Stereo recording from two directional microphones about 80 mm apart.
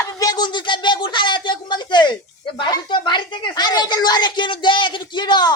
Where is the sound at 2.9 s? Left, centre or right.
Left.